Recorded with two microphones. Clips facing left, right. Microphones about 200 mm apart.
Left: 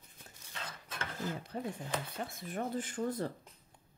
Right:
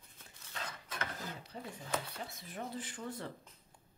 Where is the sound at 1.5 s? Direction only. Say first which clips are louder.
Right 1 dB; 55° left (ahead or behind).